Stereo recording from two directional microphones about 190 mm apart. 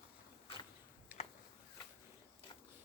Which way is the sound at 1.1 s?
5° right (ahead or behind).